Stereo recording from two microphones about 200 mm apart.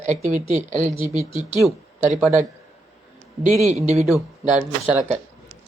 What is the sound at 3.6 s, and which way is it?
Speech, 35° right (ahead or behind).